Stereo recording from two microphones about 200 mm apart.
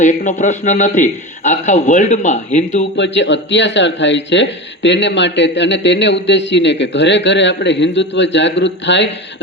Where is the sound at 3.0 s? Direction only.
65° left (ahead or behind).